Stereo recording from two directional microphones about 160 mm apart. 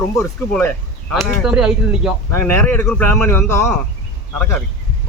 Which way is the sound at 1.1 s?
5° right (ahead or behind).